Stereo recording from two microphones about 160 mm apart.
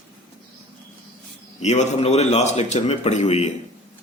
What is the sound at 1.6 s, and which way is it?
A man's voice, 45° left (ahead or behind).